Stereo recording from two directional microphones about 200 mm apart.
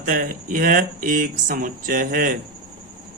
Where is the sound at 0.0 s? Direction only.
45° right (ahead or behind).